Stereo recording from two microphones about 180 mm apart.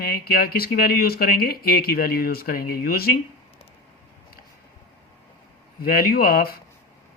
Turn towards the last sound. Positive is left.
turn(degrees=55)  # may be behind; listen again after turning